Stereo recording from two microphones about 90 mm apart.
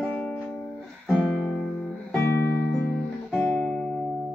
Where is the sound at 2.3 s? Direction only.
25° left (ahead or behind).